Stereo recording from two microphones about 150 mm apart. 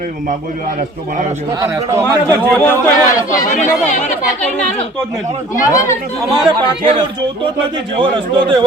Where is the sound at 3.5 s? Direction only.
55° left (ahead or behind).